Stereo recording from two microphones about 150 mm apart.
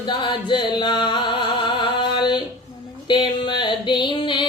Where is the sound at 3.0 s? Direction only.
30° left (ahead or behind).